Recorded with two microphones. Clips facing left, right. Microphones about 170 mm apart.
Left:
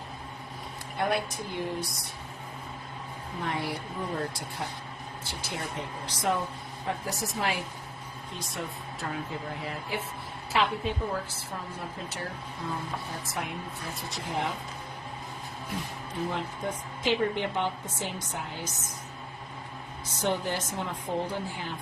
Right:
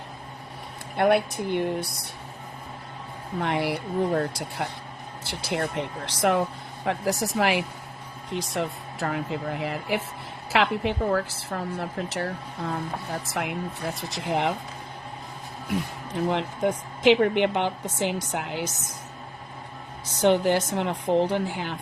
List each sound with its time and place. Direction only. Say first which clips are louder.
0.9 s a woman's voice: right 8 dB; 65° right (ahead or behind)
3.4 s a woman's voice: right 6 dB; 80° right
16.3 s a woman's voice: right 8 dB; 85° right
20.2 s a woman's voice: right 9 dB; 80° right